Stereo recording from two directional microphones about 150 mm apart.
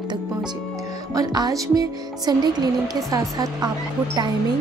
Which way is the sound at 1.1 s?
25° right (ahead or behind).